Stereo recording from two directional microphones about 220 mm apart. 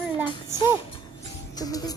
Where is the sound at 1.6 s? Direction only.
15° left (ahead or behind).